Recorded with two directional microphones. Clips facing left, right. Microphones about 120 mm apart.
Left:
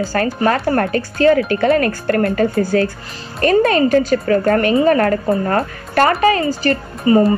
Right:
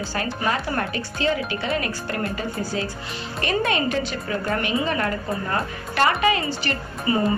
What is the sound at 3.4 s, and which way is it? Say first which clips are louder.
Speech: left 10 dB; 40° left (ahead or behind).